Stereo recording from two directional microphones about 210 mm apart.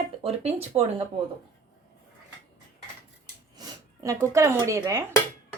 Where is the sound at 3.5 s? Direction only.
15° right (ahead or behind).